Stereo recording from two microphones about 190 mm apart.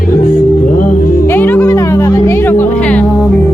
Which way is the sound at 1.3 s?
10° left (ahead or behind).